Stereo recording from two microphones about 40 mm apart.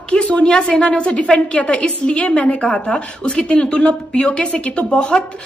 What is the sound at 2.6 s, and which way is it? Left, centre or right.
A woman's voice, left.